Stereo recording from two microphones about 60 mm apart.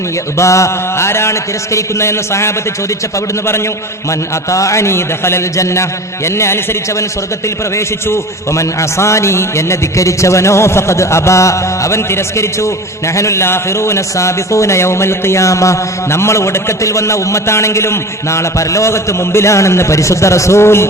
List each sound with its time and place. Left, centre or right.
0.3 s a man's voice: left
4.4 s a man's voice: left
7.8 s a man's voice: left